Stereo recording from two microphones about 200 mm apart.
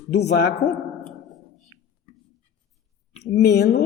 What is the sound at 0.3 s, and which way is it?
Speech, 55° left (ahead or behind).